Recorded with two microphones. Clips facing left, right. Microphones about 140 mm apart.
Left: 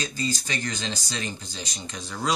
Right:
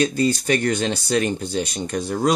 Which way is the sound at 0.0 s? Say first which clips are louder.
Right 11 dB; 60° right (ahead or behind).